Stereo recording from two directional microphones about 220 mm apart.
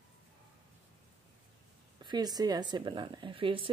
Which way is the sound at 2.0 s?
20° right (ahead or behind).